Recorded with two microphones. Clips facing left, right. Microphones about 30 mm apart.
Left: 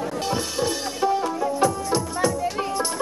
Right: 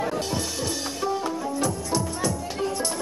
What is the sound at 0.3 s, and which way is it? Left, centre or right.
Music, centre.